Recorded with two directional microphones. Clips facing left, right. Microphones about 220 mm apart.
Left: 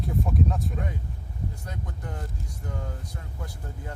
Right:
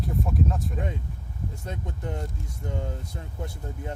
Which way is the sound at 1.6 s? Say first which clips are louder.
Right 3 dB; 25° right (ahead or behind).